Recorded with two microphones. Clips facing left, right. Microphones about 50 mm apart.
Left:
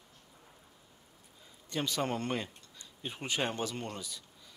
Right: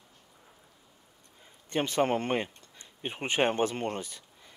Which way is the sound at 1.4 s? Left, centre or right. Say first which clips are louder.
Right 5 dB; right.